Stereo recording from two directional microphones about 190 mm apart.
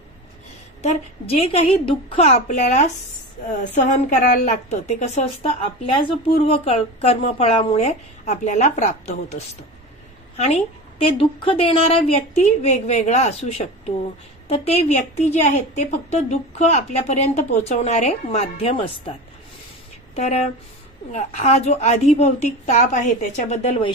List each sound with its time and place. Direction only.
0.8 s a woman's voice: 30° left (ahead or behind)
20.2 s a woman's voice: 35° left (ahead or behind)